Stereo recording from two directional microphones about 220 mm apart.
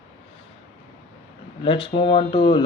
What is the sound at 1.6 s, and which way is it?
Speech, 25° left (ahead or behind).